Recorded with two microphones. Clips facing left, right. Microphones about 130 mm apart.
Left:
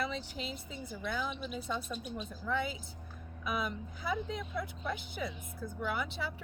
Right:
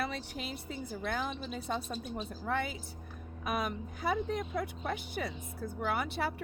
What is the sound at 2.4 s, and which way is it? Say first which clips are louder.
Speech: even; 55° right (ahead or behind).